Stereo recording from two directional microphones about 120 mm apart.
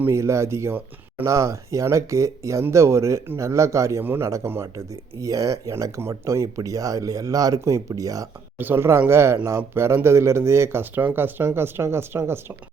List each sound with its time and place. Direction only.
0.0 s speech: 25° right (ahead or behind)
8.5 s speech: 20° right (ahead or behind)